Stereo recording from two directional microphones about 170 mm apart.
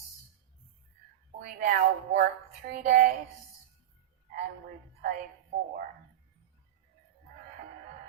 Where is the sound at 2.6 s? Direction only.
50° right (ahead or behind).